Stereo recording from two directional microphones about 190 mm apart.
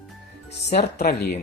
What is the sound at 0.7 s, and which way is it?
Speech, 35° left (ahead or behind).